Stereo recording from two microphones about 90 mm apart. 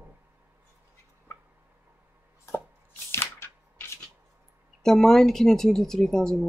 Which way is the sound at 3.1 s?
25° left (ahead or behind).